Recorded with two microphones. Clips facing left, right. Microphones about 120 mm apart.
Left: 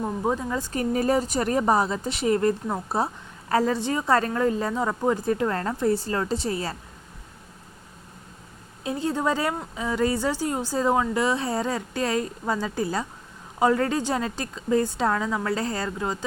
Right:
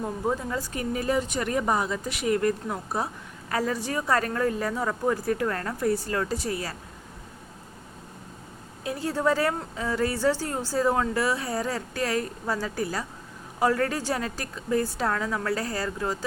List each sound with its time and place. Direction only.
0.0 s a woman's voice: 20° left (ahead or behind)
0.7 s a woman's voice: 40° left (ahead or behind)
8.8 s a woman's voice: 25° left (ahead or behind)